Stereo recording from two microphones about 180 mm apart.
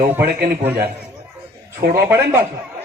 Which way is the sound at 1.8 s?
60° right (ahead or behind).